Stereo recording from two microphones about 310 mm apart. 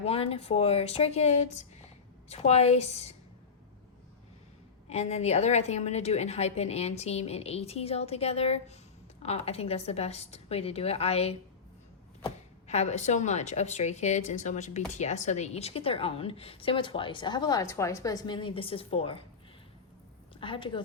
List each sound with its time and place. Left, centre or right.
0.0 s a woman's voice: centre
4.9 s a woman's voice: left
20.4 s a woman's voice: centre